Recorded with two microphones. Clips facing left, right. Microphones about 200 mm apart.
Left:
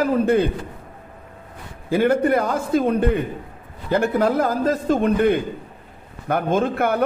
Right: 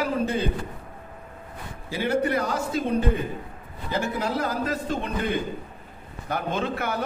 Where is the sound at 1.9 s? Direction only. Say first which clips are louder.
Left 7 dB; 55° left (ahead or behind).